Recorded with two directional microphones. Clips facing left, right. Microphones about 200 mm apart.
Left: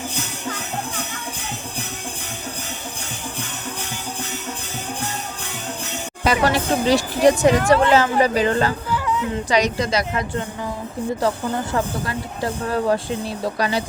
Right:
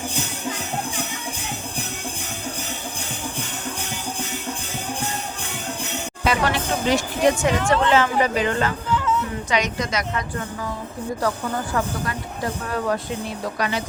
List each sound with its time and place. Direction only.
6.2 s speech: 35° left (ahead or behind)
8.9 s music: 5° left (ahead or behind)
9.5 s speech: 35° left (ahead or behind)